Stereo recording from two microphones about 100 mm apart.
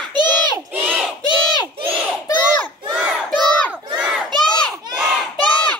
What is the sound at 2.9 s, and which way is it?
Crowd, 5° right (ahead or behind).